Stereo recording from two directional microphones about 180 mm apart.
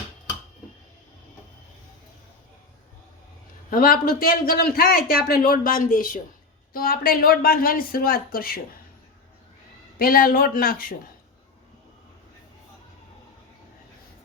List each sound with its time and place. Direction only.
3.7 s a man's voice: 50° left (ahead or behind)
10.0 s speech: 55° left (ahead or behind)